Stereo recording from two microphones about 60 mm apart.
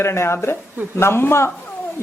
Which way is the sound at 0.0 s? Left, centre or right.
Left.